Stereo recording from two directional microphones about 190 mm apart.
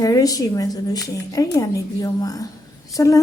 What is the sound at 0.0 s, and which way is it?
Speech, 20° left (ahead or behind).